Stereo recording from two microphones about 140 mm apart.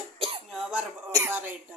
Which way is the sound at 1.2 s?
15° right (ahead or behind).